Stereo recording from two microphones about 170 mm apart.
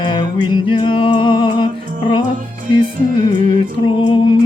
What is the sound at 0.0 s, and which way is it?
Music, 25° left (ahead or behind).